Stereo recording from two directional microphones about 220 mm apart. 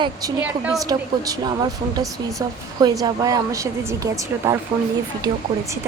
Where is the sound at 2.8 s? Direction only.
15° right (ahead or behind).